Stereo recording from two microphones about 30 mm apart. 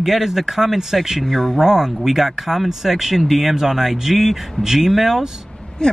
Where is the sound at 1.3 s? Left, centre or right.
Centre.